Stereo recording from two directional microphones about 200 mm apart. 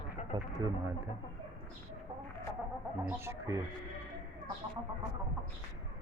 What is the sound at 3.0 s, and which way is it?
Speech, 10° right (ahead or behind).